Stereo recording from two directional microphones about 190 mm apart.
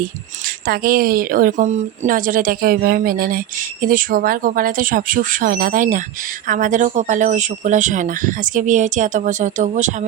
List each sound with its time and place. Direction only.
0.7 s a woman's voice: 50° right (ahead or behind)